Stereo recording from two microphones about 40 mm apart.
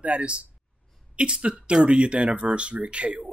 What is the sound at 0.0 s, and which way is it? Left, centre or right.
Speech, right.